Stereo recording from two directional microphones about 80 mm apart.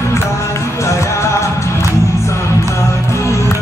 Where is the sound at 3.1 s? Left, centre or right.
Left.